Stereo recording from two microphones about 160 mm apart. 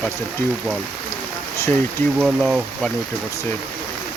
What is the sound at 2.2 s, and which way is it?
Speech, 5° right (ahead or behind).